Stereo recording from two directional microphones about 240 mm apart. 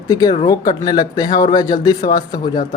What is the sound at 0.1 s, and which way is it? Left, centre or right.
Speech, centre.